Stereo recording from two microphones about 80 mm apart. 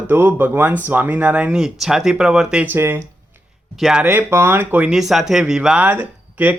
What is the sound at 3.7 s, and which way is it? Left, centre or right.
Speech, centre.